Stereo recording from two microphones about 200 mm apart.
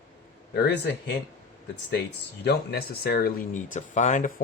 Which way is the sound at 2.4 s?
50° left (ahead or behind).